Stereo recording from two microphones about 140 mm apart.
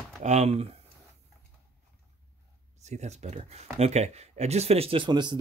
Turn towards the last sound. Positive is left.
turn(degrees=-35)  # may be behind; listen again after turning